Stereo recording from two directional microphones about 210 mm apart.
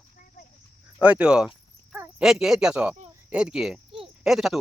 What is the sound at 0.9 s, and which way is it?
Speech, 5° right (ahead or behind).